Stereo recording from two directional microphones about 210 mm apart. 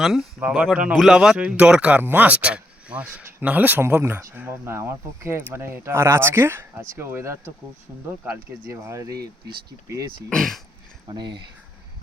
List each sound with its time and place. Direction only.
0.0 s speech: centre (ahead or behind)
9.1 s speech: 50° right (ahead or behind)
9.9 s speech: 15° right (ahead or behind)
10.2 s speech: centre (ahead or behind)
11.1 s speech: 20° right (ahead or behind)